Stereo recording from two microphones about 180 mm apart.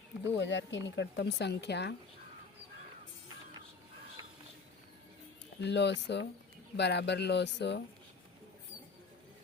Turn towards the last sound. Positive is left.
turn(degrees=70)  # may be behind; listen again after turning